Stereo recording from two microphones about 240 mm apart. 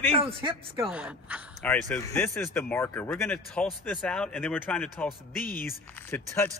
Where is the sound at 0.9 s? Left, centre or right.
Centre.